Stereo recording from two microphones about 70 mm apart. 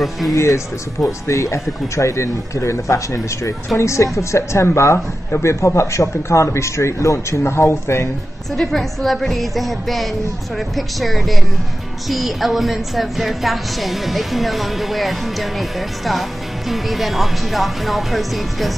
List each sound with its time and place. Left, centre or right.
0.3 s speech: left
8.5 s speech: centre